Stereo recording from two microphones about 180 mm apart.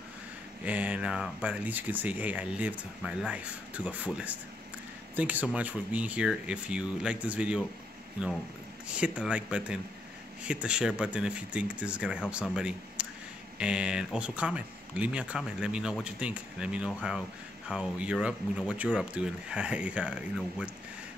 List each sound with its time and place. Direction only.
0.7 s speech: 10° right (ahead or behind)
8.8 s speech: 5° right (ahead or behind)